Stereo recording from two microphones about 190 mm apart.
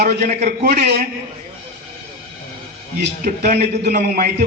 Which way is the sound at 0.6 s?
60° right (ahead or behind).